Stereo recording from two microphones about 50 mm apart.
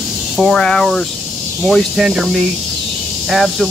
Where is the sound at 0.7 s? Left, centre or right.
Centre.